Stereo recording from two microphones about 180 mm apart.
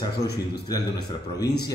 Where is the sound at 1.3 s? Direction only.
20° left (ahead or behind).